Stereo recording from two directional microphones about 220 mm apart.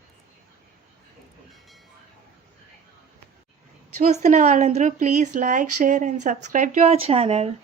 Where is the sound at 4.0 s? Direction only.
35° right (ahead or behind).